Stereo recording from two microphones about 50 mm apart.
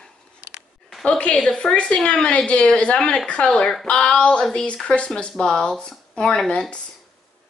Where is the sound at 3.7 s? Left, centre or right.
Centre.